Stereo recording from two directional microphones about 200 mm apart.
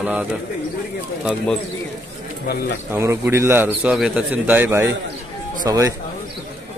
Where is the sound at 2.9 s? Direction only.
10° right (ahead or behind).